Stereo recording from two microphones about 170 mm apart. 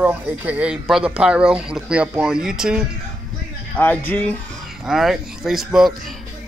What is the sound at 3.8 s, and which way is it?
Speech, 10° left (ahead or behind).